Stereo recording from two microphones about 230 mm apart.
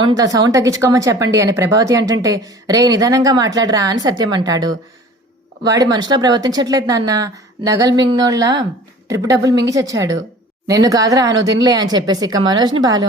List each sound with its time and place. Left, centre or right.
0.2 s speech: centre